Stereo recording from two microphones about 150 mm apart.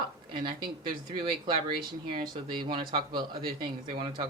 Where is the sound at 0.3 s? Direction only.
30° right (ahead or behind).